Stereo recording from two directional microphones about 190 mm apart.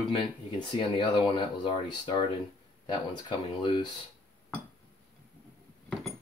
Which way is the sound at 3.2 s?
25° left (ahead or behind).